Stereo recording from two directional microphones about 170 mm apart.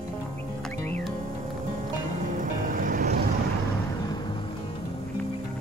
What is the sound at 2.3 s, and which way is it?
Vehicle, 50° right (ahead or behind).